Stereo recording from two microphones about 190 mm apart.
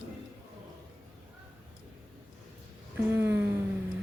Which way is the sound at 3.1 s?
10° right (ahead or behind).